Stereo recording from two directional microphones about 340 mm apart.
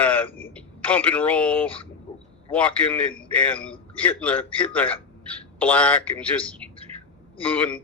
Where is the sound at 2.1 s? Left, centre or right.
Centre.